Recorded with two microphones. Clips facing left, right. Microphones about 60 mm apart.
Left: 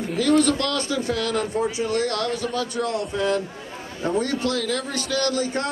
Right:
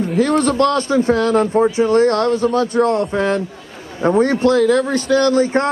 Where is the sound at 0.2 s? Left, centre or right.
Right.